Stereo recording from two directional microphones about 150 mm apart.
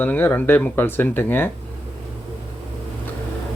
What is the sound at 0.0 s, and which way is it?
Speech, 10° left (ahead or behind).